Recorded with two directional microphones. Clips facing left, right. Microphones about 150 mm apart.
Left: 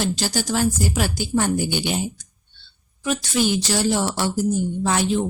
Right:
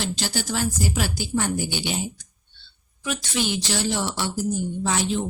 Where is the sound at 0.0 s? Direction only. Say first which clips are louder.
Left 4 dB; 40° left (ahead or behind).